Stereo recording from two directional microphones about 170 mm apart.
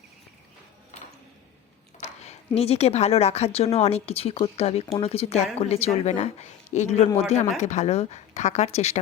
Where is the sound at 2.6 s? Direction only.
35° left (ahead or behind).